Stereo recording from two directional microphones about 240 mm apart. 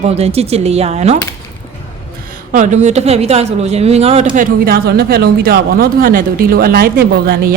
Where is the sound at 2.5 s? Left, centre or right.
Right.